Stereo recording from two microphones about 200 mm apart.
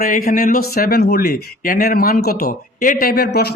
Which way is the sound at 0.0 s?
45° left (ahead or behind).